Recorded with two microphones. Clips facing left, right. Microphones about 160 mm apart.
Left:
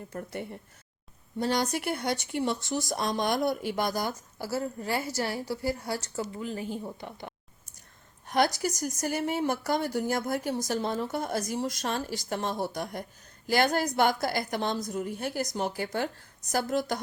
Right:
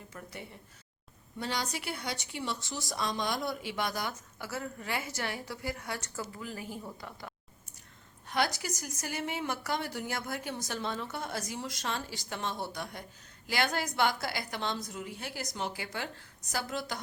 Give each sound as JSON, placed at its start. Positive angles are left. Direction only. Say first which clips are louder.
{"t": 0.1, "sound": "a woman's voice", "louder": "left 9 dB", "side_deg": 50}
{"t": 8.3, "sound": "a woman's voice", "louder": "left 6 dB", "side_deg": 40}